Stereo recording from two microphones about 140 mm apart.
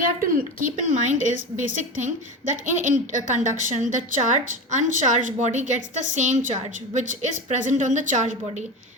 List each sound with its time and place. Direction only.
0.0 s a woman's voice: 85° right; by 8.6 s 60° right (ahead or behind)